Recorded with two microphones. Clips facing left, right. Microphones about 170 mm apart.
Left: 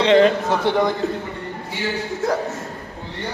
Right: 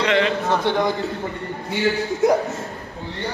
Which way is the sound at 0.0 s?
35° left (ahead or behind).